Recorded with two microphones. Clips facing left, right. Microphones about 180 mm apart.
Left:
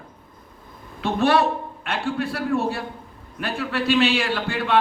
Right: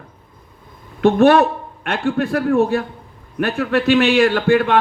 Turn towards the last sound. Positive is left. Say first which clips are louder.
# right 9 dB
turn(degrees=-50)  # may be behind; listen again after turning